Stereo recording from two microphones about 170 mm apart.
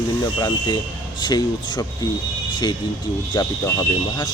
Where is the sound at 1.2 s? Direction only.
25° left (ahead or behind).